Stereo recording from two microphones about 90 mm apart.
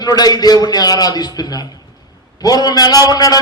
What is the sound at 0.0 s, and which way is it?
A man's voice, 45° left (ahead or behind).